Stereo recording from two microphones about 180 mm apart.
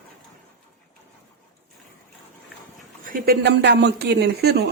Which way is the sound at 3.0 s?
55° right (ahead or behind).